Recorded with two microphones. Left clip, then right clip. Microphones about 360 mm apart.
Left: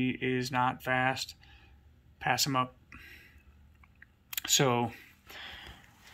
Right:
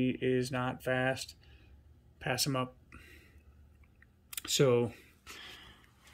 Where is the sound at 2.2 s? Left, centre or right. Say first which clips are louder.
Left 5 dB; centre.